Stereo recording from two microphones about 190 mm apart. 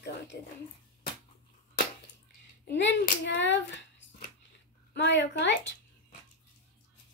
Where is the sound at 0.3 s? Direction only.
55° left (ahead or behind).